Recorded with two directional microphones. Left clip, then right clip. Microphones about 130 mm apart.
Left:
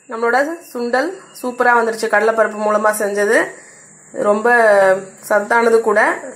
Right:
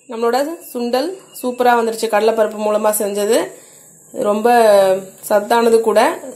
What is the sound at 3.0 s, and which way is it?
Speech, 15° right (ahead or behind).